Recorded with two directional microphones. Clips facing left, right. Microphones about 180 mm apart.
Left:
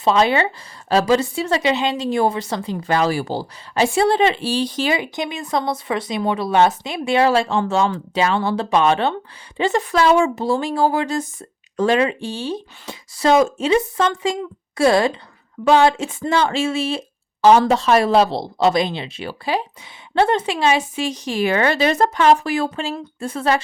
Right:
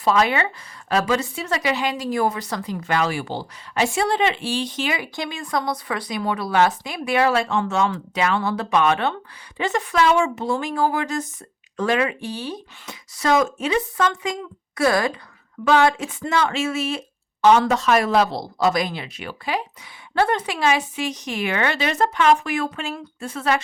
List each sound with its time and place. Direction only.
0.0 s a woman's voice: 25° left (ahead or behind)
5.1 s a woman's voice: 20° left (ahead or behind)